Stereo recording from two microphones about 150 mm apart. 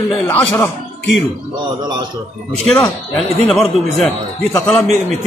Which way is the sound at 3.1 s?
Centre (ahead or behind).